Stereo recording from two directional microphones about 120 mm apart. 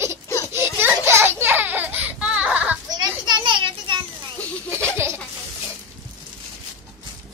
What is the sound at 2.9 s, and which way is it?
Children playing, 35° right (ahead or behind).